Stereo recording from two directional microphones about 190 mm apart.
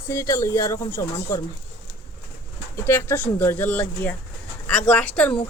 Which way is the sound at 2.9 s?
15° left (ahead or behind).